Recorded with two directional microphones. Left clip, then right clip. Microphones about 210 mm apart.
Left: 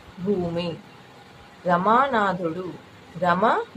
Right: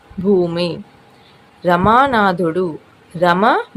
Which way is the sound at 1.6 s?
50° right (ahead or behind).